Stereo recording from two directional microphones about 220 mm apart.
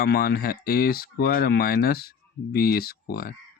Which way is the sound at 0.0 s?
45° left (ahead or behind).